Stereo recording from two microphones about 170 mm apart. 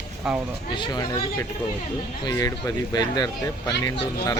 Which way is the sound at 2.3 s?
20° left (ahead or behind).